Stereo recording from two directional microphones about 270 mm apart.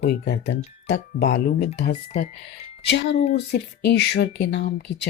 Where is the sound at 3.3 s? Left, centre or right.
Left.